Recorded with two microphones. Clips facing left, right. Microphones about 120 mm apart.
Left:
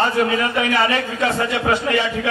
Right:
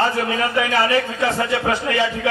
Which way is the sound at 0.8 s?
20° left (ahead or behind).